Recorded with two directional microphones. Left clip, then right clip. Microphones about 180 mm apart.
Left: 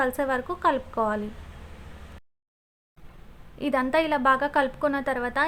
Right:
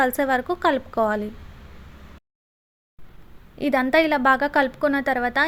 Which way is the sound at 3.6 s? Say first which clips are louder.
Right 5 dB; 20° right (ahead or behind).